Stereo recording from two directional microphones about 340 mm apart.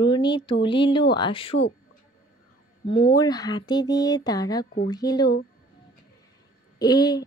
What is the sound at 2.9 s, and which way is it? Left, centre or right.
Speech, centre.